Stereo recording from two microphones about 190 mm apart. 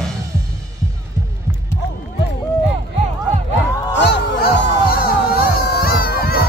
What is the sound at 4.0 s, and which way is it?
Music, 60° left (ahead or behind).